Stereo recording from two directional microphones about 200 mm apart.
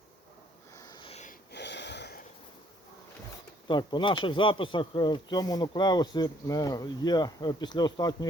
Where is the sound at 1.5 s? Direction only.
60° left (ahead or behind).